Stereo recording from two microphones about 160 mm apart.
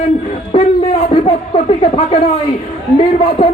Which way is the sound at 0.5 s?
30° left (ahead or behind).